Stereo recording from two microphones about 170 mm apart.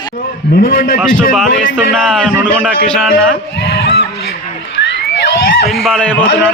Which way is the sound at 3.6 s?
85° left.